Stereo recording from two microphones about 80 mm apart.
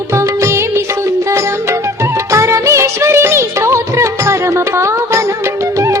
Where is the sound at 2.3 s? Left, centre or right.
Right.